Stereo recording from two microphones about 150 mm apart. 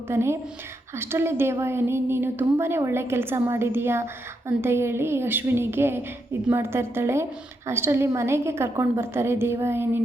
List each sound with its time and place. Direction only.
0.1 s a woman's voice: 15° right (ahead or behind)